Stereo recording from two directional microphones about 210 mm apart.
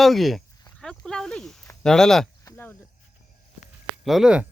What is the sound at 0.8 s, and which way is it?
Snake, 5° left (ahead or behind).